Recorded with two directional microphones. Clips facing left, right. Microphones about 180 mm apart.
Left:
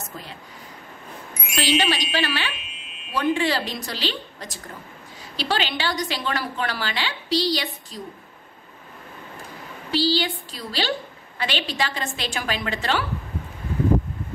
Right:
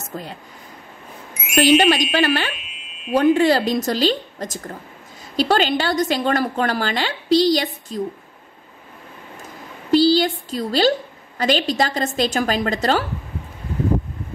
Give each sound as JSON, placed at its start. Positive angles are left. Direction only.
{"t": 0.1, "sound": "a woman's voice", "side_deg": -45}
{"t": 1.5, "sound": "a woman's voice", "side_deg": -50}
{"t": 9.8, "sound": "a woman's voice", "side_deg": -45}